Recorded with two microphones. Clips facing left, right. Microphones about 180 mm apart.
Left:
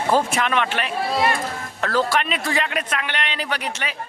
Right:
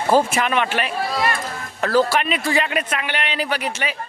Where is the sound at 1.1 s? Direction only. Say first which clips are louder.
Left 3 dB; 25° left (ahead or behind).